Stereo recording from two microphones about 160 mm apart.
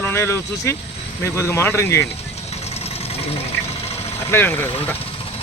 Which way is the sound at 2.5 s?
40° left (ahead or behind).